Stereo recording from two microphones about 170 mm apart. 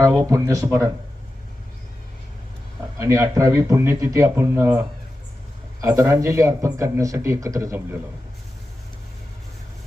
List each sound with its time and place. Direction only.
0.0 s speech: 20° right (ahead or behind)
3.0 s a man's voice: 20° right (ahead or behind)